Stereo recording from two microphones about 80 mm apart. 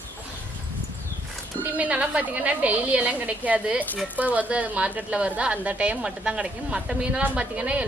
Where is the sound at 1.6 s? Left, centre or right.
Centre.